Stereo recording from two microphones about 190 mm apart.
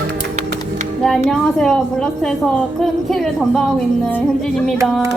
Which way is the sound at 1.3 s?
5° left (ahead or behind).